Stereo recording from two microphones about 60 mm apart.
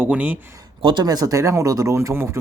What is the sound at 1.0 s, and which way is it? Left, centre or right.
Speech, right.